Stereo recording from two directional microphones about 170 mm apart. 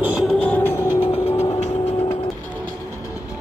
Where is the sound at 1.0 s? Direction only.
35° left (ahead or behind).